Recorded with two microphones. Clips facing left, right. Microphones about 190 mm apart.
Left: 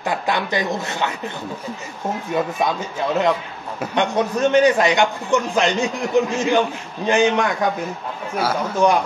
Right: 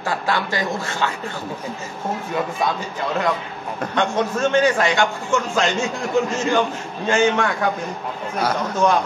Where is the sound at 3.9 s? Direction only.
15° left (ahead or behind).